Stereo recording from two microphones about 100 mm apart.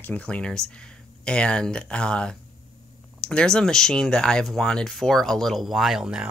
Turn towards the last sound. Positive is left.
turn(degrees=-10)  # may be behind; listen again after turning